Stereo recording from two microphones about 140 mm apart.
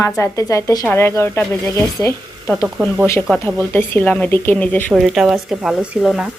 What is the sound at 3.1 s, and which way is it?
Speech, 15° left (ahead or behind).